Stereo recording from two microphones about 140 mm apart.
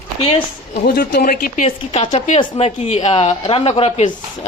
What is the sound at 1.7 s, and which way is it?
A woman's voice, 40° left (ahead or behind).